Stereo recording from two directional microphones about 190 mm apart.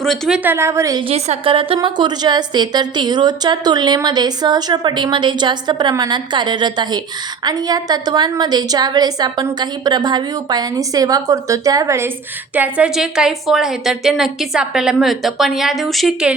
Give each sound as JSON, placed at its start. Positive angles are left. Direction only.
{"t": 0.0, "sound": "a woman's voice", "side_deg": 0}
{"t": 1.1, "sound": "a woman's voice", "side_deg": -30}